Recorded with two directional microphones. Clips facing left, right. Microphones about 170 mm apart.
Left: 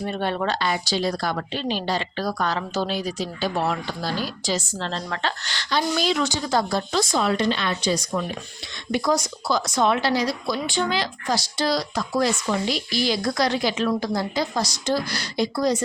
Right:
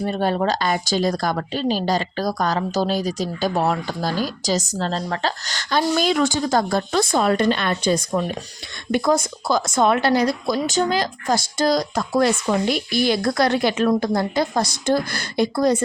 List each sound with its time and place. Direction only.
0.0 s a woman's voice: 35° right (ahead or behind); by 15.8 s 55° right (ahead or behind)